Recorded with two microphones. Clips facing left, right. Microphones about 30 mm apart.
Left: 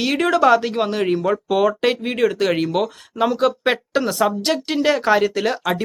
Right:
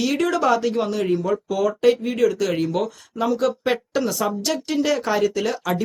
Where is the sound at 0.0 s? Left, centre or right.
Left.